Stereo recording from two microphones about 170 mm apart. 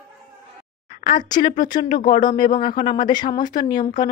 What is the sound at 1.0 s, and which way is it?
Speech, 30° left (ahead or behind).